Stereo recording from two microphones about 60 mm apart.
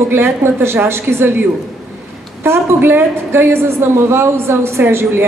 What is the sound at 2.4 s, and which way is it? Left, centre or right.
A woman's voice, right.